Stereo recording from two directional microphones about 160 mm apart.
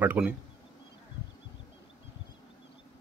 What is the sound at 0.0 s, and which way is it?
Speech, 10° right (ahead or behind).